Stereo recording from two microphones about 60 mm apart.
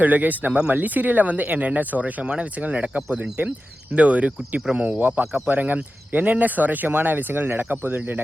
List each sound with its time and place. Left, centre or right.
0.0 s speech: right